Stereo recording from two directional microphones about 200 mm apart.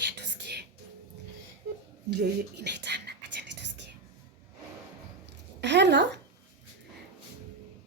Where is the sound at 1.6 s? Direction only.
55° right (ahead or behind).